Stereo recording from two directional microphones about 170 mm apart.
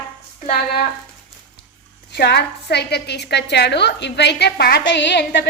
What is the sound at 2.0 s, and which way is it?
A woman's voice, 75° left (ahead or behind).